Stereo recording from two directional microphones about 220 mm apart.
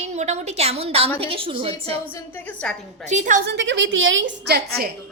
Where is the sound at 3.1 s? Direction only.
35° right (ahead or behind).